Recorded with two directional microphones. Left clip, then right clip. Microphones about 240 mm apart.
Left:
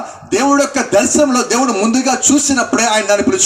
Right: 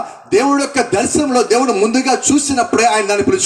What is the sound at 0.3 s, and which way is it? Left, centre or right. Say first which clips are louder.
Speech: left 1 dB; left.